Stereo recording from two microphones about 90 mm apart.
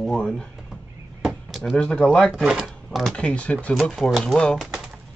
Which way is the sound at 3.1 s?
15° left (ahead or behind).